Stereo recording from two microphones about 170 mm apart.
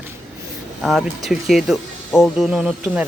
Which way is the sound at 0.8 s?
Centre (ahead or behind).